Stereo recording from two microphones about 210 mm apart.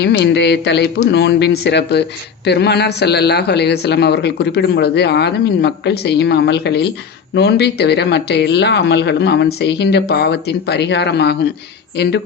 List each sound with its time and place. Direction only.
0.0 s speech: 55° left (ahead or behind)